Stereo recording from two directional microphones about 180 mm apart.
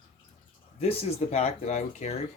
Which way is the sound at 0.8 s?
35° left (ahead or behind).